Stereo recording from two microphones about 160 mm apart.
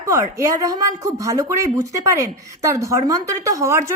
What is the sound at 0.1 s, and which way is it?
A woman's voice, 20° right (ahead or behind).